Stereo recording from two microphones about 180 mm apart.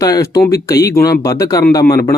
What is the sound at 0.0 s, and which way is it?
Speech, 15° left (ahead or behind).